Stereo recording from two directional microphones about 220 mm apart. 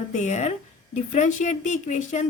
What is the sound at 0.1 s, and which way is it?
A woman's voice, 35° left (ahead or behind).